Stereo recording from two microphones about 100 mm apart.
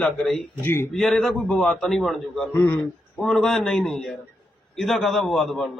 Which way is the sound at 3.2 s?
Centre (ahead or behind).